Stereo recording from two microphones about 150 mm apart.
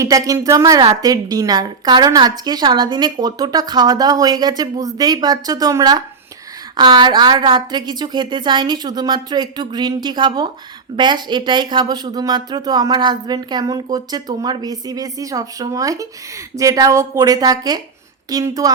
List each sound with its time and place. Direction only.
0.0 s a woman's voice: 20° right (ahead or behind)